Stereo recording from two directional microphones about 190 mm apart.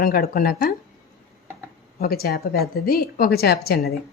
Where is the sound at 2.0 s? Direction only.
55° left (ahead or behind).